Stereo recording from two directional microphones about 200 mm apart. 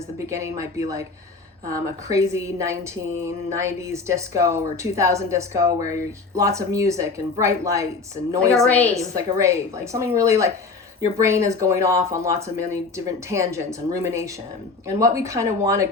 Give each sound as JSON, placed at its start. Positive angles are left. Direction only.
{"t": 0.2, "sound": "a woman's voice", "side_deg": -15}
{"t": 2.0, "sound": "a woman's voice", "side_deg": -15}
{"t": 8.7, "sound": "a woman's voice", "side_deg": 5}
{"t": 9.1, "sound": "a woman's voice", "side_deg": -15}